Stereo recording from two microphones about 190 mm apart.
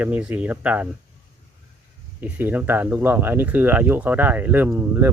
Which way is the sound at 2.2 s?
10° right (ahead or behind).